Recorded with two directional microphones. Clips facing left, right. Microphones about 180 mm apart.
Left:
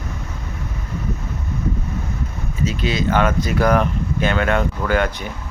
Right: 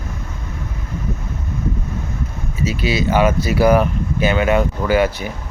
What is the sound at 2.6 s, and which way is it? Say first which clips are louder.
Speech: right 2 dB; 10° right (ahead or behind).